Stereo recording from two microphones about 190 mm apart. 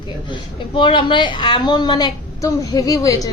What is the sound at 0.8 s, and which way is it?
A woman's voice, 25° left (ahead or behind).